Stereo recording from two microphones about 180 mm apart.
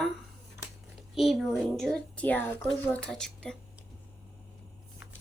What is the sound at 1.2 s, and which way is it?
A woman's voice, centre (ahead or behind).